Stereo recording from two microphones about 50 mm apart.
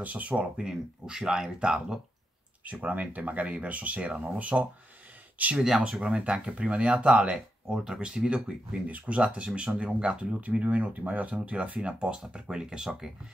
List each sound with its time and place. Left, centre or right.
0.0 s speech: right
0.6 s speech: centre
2.6 s speech: right
5.8 s speech: centre
8.8 s speech: right; by 13.1 s centre